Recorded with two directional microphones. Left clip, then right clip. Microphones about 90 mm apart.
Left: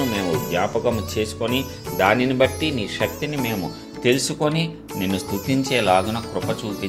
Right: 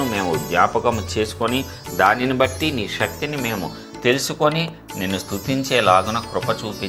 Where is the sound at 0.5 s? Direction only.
40° left (ahead or behind).